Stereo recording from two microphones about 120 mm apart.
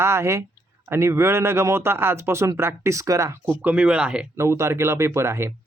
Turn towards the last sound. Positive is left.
turn(degrees=-20)  # may be behind; listen again after turning